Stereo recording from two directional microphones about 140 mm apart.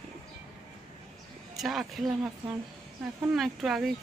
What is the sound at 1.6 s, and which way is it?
Speech, centre (ahead or behind).